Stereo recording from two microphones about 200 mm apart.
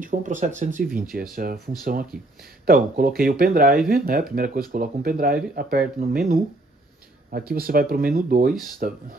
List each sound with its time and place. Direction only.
0.0 s speech: 40° right (ahead or behind)